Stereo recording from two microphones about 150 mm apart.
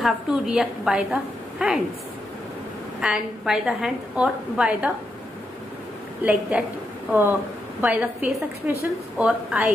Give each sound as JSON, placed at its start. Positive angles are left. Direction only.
{"t": 0.0, "sound": "a woman's voice", "side_deg": -5}
{"t": 3.0, "sound": "a woman's voice", "side_deg": -5}
{"t": 6.2, "sound": "a woman's voice", "side_deg": -10}